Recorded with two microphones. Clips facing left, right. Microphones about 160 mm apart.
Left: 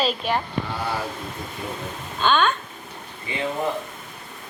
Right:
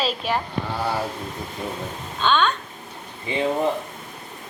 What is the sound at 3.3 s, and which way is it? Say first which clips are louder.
Speech: right 5 dB; 30° right (ahead or behind).